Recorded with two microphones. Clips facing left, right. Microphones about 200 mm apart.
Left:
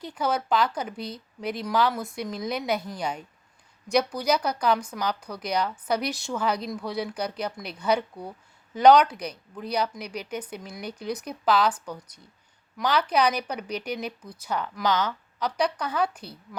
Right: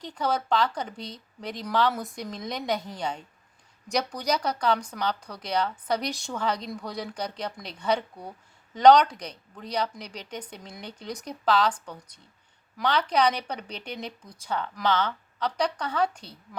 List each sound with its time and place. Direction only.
0.0 s a woman's voice: 10° left (ahead or behind)
4.3 s a woman's voice: 10° left (ahead or behind)